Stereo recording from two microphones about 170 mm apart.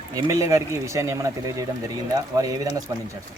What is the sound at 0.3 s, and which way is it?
Speech, 15° right (ahead or behind).